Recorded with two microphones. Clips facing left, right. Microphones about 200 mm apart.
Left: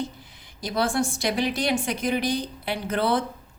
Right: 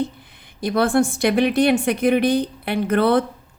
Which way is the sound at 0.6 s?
60° right (ahead or behind).